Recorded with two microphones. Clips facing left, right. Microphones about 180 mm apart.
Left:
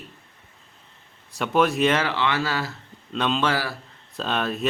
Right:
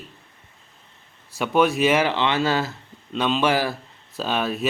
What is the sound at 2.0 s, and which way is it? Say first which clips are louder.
Speech: right 3 dB; 20° right (ahead or behind).